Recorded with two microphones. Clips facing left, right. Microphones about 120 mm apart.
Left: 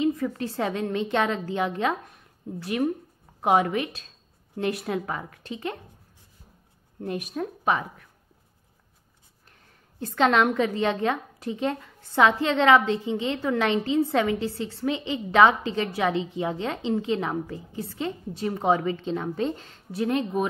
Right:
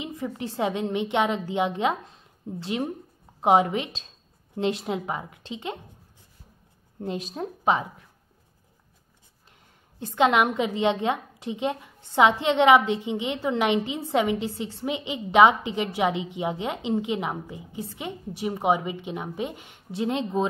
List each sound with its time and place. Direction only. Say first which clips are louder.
0.0 s a woman's voice: left 7 dB; 20° right (ahead or behind)
7.0 s a woman's voice: left 1 dB; 25° right (ahead or behind)
9.9 s a woman's voice: even; 20° right (ahead or behind)